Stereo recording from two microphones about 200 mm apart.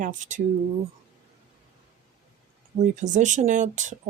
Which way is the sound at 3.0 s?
40° right (ahead or behind).